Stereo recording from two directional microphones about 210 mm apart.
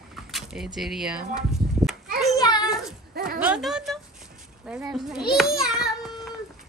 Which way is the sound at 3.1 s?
45° right (ahead or behind).